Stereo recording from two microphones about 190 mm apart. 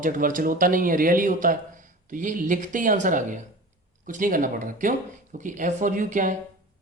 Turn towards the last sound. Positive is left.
turn(degrees=-45)  # may be behind; listen again after turning